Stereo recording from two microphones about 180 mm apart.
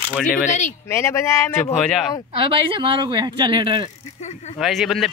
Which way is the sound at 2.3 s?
30° right (ahead or behind).